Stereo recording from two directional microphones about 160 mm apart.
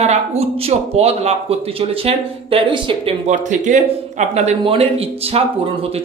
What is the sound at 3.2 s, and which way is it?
Speech, 50° right (ahead or behind).